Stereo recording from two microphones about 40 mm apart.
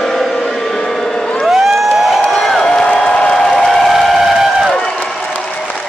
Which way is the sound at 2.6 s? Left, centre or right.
Centre.